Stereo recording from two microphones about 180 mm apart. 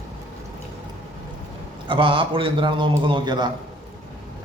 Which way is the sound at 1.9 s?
30° right (ahead or behind).